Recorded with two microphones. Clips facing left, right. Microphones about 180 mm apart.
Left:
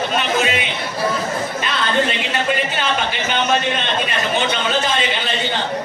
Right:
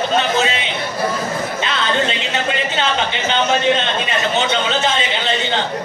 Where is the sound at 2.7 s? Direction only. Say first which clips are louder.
Right 2 dB; 25° right (ahead or behind).